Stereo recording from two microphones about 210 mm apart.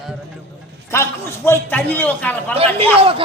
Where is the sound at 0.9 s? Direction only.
10° left (ahead or behind).